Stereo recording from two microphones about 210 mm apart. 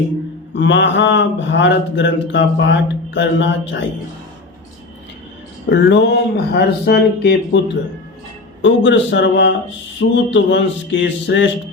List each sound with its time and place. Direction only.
0.5 s speech: 60° left (ahead or behind)
5.6 s speech: 55° left (ahead or behind)
8.6 s speech: 60° left (ahead or behind)